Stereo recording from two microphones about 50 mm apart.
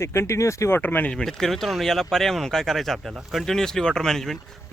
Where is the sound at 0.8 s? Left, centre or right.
Left.